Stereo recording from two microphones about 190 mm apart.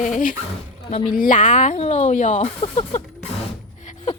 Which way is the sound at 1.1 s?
45° left (ahead or behind).